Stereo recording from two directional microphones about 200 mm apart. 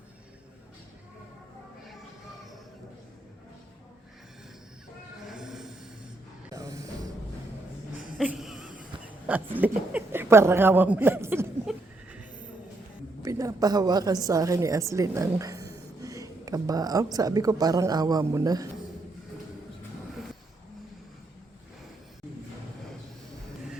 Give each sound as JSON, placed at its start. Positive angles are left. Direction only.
{"t": 5.3, "sound": "train", "side_deg": 0}
{"t": 6.5, "sound": "music", "side_deg": -15}
{"t": 8.2, "sound": "a sound", "side_deg": -5}
{"t": 13.2, "sound": "a woman's voice", "side_deg": -15}